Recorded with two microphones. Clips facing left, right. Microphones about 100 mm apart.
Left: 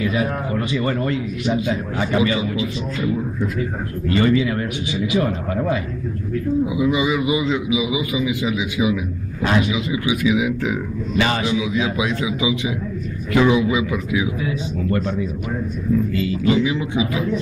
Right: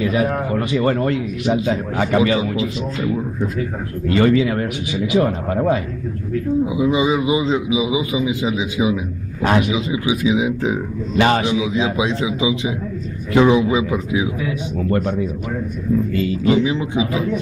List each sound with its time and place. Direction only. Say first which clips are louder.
0.0 s a man's voice: right 3 dB; 55° right (ahead or behind)
4.1 s speech: right 2 dB; 60° right (ahead or behind)
5.1 s a man's voice: right 4 dB; 40° right (ahead or behind)
6.6 s a man's voice: right 2 dB; 25° right (ahead or behind)
9.8 s a man's voice: right 1 dB; 25° right (ahead or behind)
11.1 s a man's voice: right 5 dB; 50° right (ahead or behind)
11.4 s a man's voice: right 2 dB; 25° right (ahead or behind)
14.8 s a man's voice: right 3 dB; 50° right (ahead or behind)
16.2 s a man's voice: right 2 dB; 30° right (ahead or behind)